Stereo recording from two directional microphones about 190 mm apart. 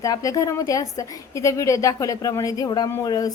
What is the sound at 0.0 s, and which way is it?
A woman's voice, 15° left (ahead or behind).